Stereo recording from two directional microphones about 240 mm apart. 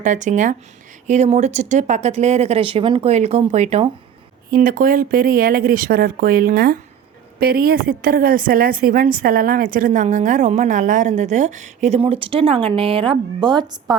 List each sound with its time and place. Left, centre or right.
0.0 s a woman's voice: right